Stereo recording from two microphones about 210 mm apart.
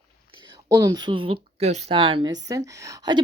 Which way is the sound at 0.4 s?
20° right (ahead or behind).